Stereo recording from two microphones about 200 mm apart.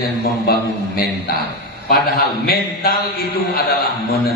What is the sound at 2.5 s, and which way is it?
Speech, 50° left (ahead or behind).